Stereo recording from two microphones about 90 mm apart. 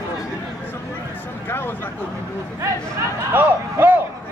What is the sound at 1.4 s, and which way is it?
Speech, 25° left (ahead or behind).